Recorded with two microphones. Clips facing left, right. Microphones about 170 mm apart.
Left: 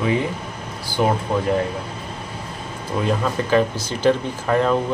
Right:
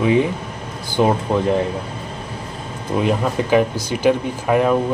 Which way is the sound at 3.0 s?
20° right (ahead or behind).